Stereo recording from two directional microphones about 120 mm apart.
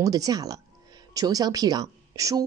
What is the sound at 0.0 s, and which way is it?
Speech, 30° right (ahead or behind).